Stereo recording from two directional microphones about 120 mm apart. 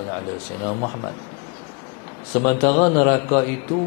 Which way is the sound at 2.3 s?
20° left (ahead or behind).